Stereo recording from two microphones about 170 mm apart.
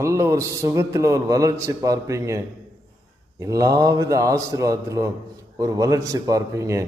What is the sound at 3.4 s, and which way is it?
A man's voice, 20° right (ahead or behind).